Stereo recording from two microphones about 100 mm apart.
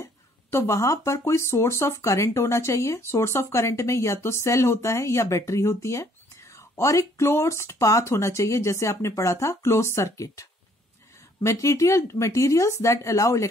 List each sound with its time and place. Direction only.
0.0 s speech: 30° left (ahead or behind)